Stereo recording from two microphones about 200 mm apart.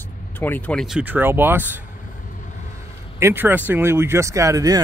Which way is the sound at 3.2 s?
10° right (ahead or behind).